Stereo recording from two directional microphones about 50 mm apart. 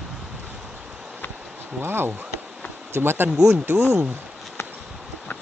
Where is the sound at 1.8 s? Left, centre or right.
Right.